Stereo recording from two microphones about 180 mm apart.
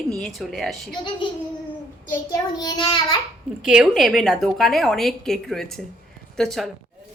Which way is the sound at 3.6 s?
5° right (ahead or behind).